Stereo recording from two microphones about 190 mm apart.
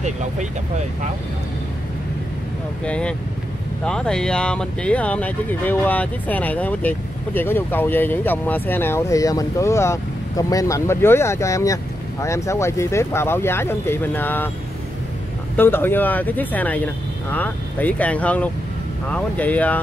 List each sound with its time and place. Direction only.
0.0 s speech: 40° right (ahead or behind)
2.8 s speech: 5° left (ahead or behind)
15.5 s speech: 10° left (ahead or behind)